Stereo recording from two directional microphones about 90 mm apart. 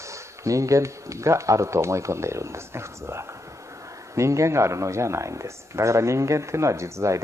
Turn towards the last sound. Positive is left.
turn(degrees=-35)  # may be behind; listen again after turning